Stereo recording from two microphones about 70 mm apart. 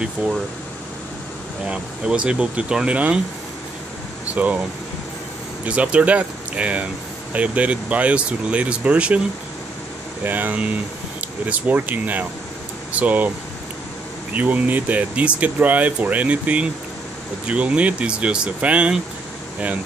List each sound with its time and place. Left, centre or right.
0.0 s speech: centre
1.7 s speech: centre
4.4 s speech: right
5.7 s speech: centre
10.2 s speech: right
14.3 s speech: right